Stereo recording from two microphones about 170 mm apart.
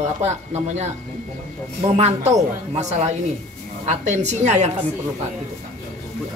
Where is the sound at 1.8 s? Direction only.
40° right (ahead or behind).